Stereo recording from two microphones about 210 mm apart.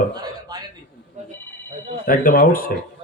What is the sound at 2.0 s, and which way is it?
Mantra, 40° left (ahead or behind).